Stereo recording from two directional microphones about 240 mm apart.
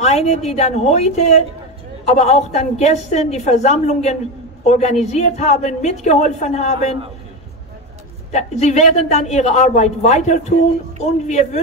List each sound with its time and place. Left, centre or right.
0.0 s a woman's voice: left
8.3 s a woman's voice: left